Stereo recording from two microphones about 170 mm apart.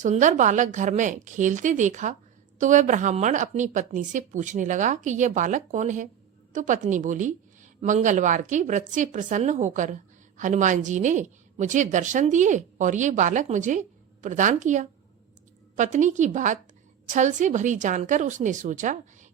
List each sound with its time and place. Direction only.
0.0 s a woman's voice: 45° right (ahead or behind)